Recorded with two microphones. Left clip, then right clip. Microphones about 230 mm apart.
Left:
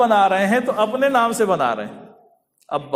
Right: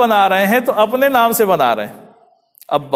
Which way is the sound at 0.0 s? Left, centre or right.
Right.